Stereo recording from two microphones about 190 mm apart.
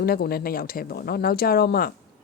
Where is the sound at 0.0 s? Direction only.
55° left (ahead or behind).